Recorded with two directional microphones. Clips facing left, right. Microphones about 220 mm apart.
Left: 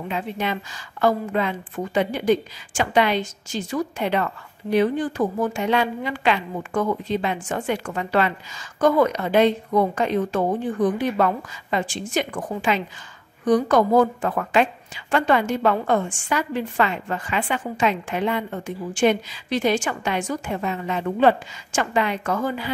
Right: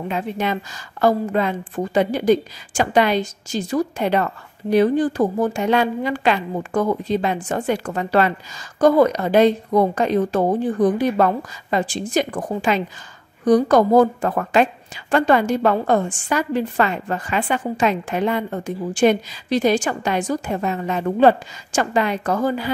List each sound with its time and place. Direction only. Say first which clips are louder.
0.1 s a woman's voice: right 3 dB; 45° right (ahead or behind)